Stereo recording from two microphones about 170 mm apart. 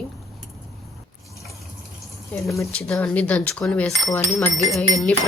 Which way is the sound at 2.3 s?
15° left (ahead or behind).